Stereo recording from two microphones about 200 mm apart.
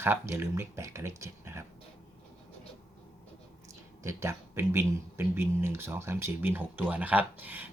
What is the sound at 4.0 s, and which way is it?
Speech, 15° right (ahead or behind).